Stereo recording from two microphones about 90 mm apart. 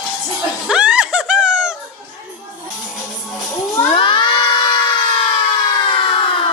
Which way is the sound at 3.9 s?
70° left (ahead or behind).